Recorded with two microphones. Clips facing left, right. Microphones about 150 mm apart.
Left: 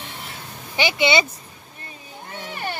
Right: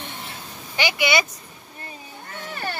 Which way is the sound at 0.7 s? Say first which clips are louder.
Left 2 dB; 25° left (ahead or behind).